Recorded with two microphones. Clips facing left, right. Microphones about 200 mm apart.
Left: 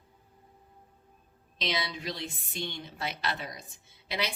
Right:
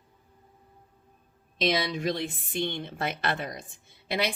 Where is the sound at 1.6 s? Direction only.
50° right (ahead or behind).